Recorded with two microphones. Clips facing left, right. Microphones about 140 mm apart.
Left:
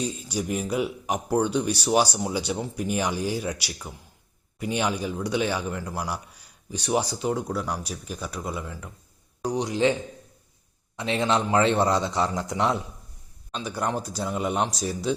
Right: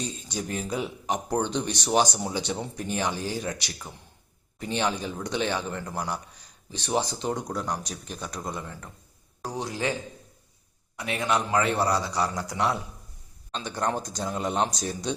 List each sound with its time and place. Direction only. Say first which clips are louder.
0.3 s a man's voice: left 2 dB; 10° left (ahead or behind)
9.5 s a man's voice: left 6 dB; 20° left (ahead or behind)
13.5 s a man's voice: left 1 dB; 10° left (ahead or behind)